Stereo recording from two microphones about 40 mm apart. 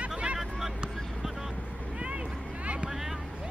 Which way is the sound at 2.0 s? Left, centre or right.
Right.